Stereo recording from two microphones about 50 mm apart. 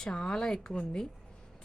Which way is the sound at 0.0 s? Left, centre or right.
Centre.